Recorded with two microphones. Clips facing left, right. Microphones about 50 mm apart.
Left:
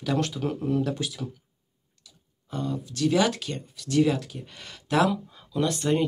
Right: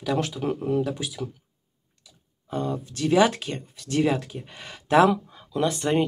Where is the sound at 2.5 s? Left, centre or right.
Right.